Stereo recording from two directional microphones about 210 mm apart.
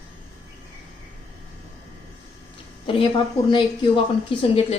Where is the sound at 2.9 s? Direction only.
25° left (ahead or behind).